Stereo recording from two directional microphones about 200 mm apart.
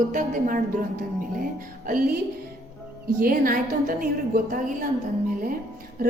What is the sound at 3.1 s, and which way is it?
Speech, 45° right (ahead or behind).